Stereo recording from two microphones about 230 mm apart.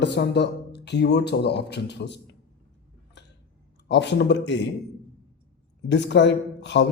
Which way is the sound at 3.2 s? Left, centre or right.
Left.